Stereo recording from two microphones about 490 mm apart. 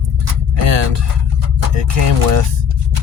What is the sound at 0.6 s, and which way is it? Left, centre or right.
Speech, right.